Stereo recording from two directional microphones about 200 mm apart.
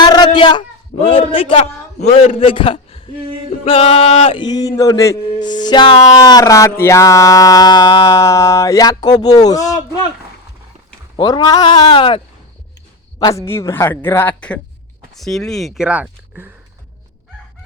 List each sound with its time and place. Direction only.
0.0 s a man's voice: 20° left (ahead or behind)
11.2 s speech: 20° left (ahead or behind); by 16.5 s 5° right (ahead or behind)